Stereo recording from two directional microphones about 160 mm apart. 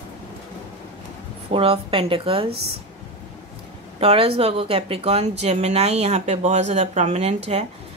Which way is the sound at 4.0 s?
40° right (ahead or behind).